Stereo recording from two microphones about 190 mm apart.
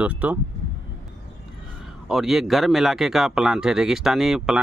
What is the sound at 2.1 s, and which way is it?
Speech, centre (ahead or behind).